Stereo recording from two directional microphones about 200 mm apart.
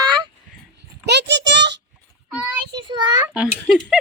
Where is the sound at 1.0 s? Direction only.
60° right (ahead or behind).